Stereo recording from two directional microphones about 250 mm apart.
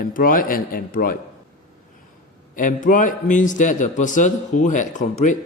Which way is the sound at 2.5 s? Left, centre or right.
Left.